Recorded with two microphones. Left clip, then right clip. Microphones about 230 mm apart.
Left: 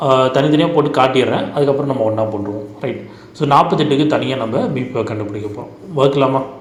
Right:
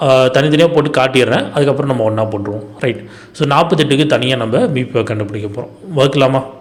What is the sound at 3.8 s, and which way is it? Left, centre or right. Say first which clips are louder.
A man's voice: right 2 dB; right.